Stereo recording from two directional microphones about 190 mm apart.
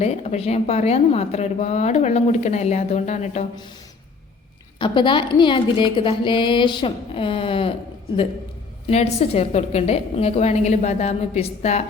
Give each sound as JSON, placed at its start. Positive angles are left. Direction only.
{"t": 0.0, "sound": "a woman's voice", "side_deg": 35}
{"t": 4.8, "sound": "speech", "side_deg": 25}
{"t": 8.9, "sound": "a woman's voice", "side_deg": 35}